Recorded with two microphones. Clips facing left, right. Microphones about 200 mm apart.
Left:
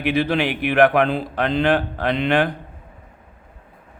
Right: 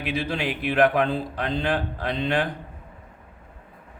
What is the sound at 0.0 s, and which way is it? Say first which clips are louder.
Speech: left 7 dB; 70° left (ahead or behind).